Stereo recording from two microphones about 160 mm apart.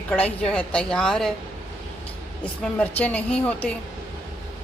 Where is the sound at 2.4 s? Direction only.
10° left (ahead or behind).